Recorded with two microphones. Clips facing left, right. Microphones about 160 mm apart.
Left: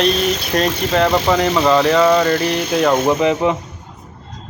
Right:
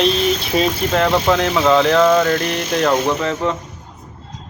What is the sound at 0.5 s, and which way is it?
Speech, centre (ahead or behind).